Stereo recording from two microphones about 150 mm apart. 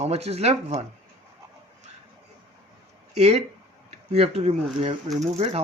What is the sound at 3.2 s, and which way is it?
Speech, 45° right (ahead or behind).